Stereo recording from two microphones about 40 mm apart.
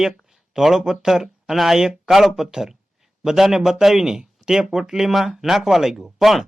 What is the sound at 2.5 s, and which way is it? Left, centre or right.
A man's voice, centre.